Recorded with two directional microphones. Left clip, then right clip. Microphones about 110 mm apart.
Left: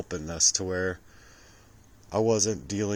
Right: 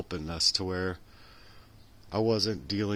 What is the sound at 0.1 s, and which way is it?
Speech, 20° right (ahead or behind).